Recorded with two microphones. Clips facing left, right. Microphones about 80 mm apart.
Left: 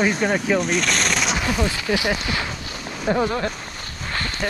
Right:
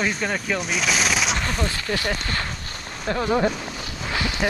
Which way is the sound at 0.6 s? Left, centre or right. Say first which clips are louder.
Left 3 dB; centre.